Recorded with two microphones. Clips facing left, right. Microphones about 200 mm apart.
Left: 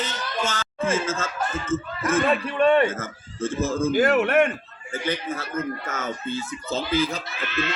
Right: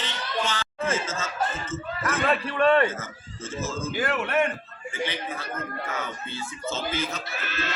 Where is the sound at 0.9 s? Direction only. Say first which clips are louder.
Left 3 dB; 50° left (ahead or behind).